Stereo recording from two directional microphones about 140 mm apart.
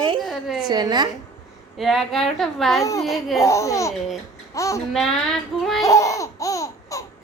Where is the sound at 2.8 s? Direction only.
25° left (ahead or behind).